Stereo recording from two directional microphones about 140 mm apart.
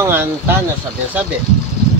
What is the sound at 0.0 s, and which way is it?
Speech, 15° right (ahead or behind).